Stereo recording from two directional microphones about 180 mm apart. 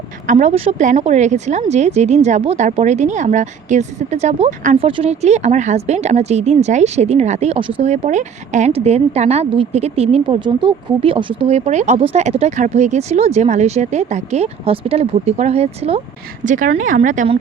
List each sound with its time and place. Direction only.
0.3 s speech: 45° right (ahead or behind)
4.8 s speech: 30° right (ahead or behind)
16.4 s speech: 45° right (ahead or behind)